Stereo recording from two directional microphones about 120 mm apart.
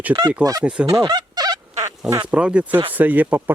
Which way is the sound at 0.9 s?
35° right (ahead or behind).